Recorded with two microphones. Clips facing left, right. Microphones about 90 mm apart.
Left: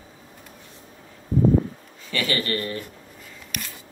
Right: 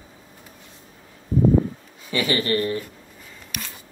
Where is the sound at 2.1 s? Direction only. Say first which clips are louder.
Right 4 dB; 20° right (ahead or behind).